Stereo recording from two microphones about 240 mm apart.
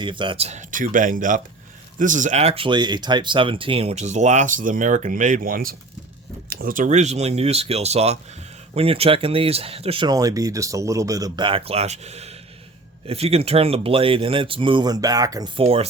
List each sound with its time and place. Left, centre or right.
0.0 s speech: centre